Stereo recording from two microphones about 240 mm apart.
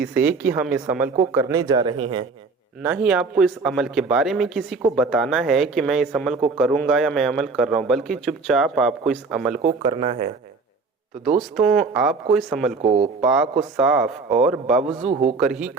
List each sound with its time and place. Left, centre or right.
0.0 s a woman's voice: centre
2.8 s a man's voice: centre
9.6 s speech: right
11.3 s a man's voice: centre
12.8 s speech: right
13.2 s a man's voice: centre
15.0 s speech: right
15.4 s a man's voice: centre